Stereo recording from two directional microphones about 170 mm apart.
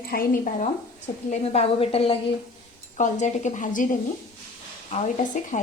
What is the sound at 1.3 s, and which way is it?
Speech, 35° left (ahead or behind).